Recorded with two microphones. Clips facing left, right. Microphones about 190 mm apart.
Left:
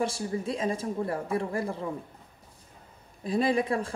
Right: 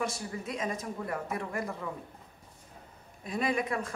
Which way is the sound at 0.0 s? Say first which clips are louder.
Left 5 dB; 30° left (ahead or behind).